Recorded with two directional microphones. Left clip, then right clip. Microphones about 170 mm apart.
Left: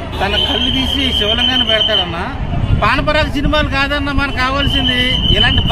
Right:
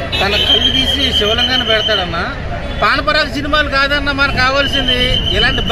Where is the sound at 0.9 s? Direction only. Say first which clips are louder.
Right 1 dB; 30° left (ahead or behind).